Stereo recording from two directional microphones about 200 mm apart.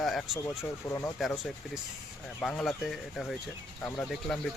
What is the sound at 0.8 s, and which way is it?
Speech, 15° left (ahead or behind).